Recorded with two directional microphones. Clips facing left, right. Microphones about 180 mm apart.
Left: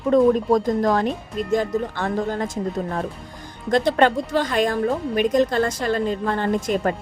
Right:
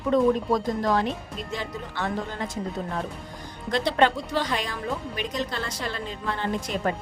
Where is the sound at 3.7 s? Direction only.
45° left (ahead or behind).